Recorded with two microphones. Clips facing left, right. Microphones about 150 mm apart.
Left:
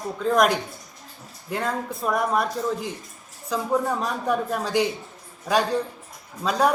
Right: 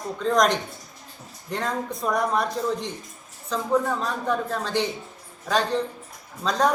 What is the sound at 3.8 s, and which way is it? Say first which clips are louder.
A woman's voice: left 1 dB; 15° left (ahead or behind).